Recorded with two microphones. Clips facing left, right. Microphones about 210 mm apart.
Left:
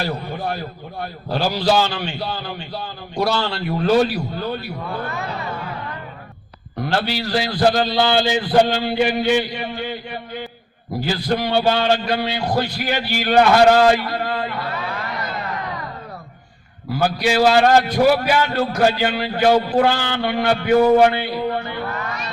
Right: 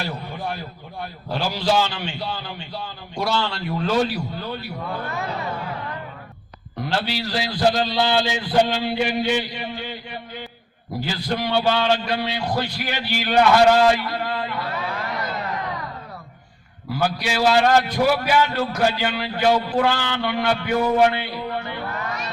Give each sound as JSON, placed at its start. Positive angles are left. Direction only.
{"t": 0.0, "sound": "a man's voice", "side_deg": 35}
{"t": 6.8, "sound": "a man's voice", "side_deg": 50}
{"t": 17.0, "sound": "a man's voice", "side_deg": 45}
{"t": 18.4, "sound": "a man's voice", "side_deg": 55}
{"t": 20.1, "sound": "a man's voice", "side_deg": 55}
{"t": 21.0, "sound": "music", "side_deg": 40}